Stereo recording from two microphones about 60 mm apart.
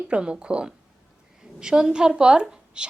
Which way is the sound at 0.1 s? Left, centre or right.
Centre.